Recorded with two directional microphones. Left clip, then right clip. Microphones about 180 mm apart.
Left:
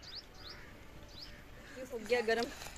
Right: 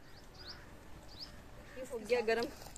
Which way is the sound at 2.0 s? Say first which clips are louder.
Left 1 dB; 20° right (ahead or behind).